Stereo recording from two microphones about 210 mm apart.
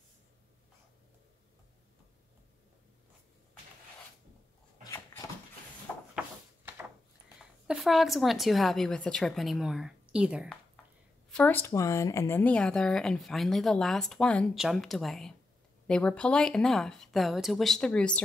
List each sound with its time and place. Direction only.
4.8 s dog: 10° left (ahead or behind)
6.1 s a sound: 10° right (ahead or behind)
7.6 s speech: centre (ahead or behind)
11.2 s speech: 5° left (ahead or behind)